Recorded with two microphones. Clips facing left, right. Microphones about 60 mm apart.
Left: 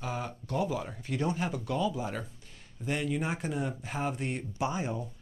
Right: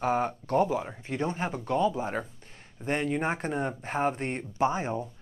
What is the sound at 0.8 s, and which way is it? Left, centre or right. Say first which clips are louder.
Speech: right 2 dB; right.